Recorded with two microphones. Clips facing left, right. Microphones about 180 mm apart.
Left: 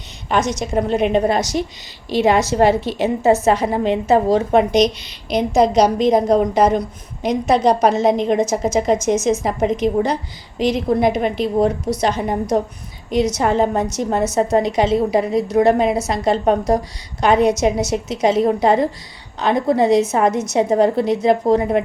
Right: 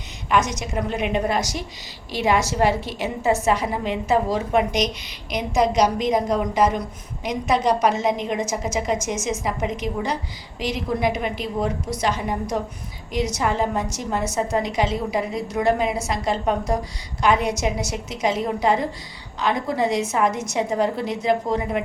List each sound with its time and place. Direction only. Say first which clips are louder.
0.3 s a woman's voice: left 3 dB; 35° left (ahead or behind)
13.3 s a woman's voice: left 6 dB; 30° left (ahead or behind)
20.1 s a woman's voice: left 5 dB; 35° left (ahead or behind)